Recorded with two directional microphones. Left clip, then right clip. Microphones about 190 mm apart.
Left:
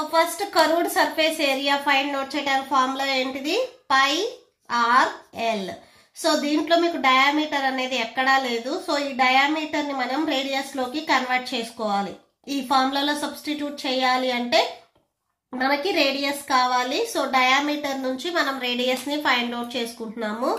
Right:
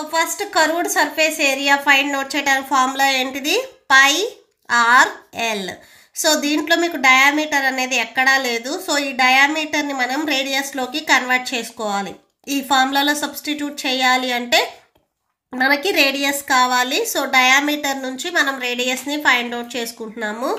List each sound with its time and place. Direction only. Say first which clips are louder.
0.1 s a woman's voice: right 3 dB; 30° right (ahead or behind)